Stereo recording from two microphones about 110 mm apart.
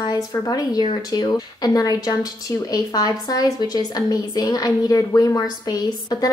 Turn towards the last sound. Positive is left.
turn(degrees=35)  # may be behind; listen again after turning